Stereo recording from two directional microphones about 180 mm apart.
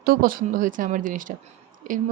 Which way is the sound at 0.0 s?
55° right (ahead or behind).